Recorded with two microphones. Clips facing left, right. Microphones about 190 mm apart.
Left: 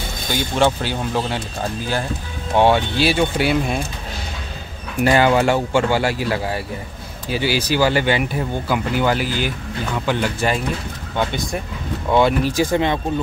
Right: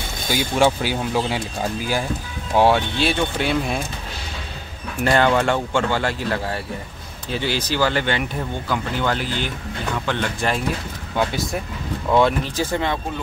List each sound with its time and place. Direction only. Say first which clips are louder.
0.3 s speech: even; 10° right (ahead or behind)
2.5 s speech: left 1 dB; centre (ahead or behind)
5.0 s speech: left 2 dB; 5° left (ahead or behind)
12.7 s speech: left 2 dB; 20° left (ahead or behind)